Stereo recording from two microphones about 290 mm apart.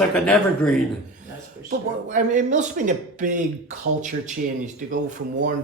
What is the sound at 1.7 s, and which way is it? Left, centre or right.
Speech, right.